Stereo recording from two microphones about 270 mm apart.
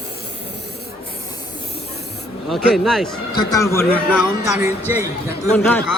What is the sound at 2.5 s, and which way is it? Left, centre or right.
A man's voice, centre.